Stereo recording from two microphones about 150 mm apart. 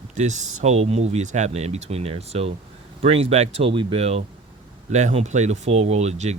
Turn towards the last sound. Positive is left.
turn(degrees=-45)  # may be behind; listen again after turning